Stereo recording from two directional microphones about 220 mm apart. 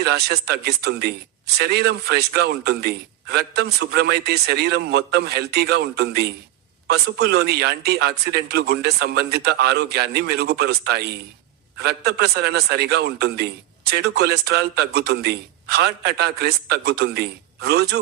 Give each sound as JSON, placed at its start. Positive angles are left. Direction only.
{"t": 0.0, "sound": "a man's voice", "side_deg": -50}